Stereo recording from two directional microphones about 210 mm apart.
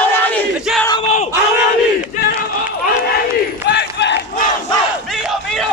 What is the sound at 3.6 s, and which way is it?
Battle cry, 55° left (ahead or behind).